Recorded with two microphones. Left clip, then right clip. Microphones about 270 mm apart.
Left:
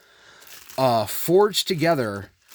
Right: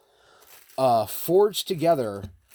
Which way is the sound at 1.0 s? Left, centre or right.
Left.